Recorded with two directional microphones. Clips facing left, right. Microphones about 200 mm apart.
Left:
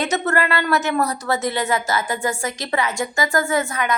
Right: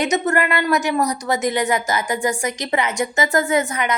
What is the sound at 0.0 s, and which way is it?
Speech, 15° right (ahead or behind).